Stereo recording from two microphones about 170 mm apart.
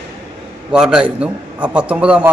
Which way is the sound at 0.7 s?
5° right (ahead or behind).